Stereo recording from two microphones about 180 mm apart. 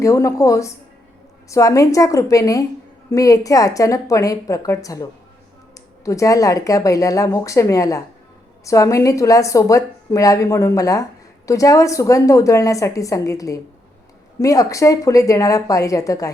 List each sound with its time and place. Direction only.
0.0 s a woman's voice: 15° left (ahead or behind)